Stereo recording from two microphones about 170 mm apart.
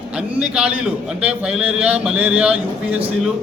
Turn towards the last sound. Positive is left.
turn(degrees=-5)  # may be behind; listen again after turning